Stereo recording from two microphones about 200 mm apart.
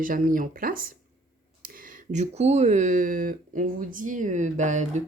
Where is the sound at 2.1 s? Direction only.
35° right (ahead or behind).